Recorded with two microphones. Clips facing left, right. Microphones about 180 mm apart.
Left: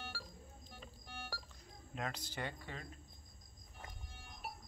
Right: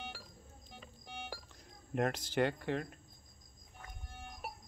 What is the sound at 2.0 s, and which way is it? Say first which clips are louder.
Speech: right 11 dB; 65° right (ahead or behind).